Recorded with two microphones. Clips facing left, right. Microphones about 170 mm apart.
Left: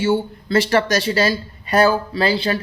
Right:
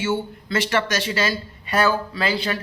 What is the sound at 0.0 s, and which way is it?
Speech, 35° left (ahead or behind).